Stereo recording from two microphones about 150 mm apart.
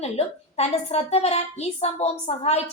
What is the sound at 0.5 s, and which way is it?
A woman's voice, 45° left (ahead or behind).